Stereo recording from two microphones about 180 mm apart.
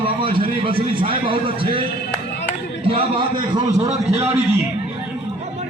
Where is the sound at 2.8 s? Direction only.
30° right (ahead or behind).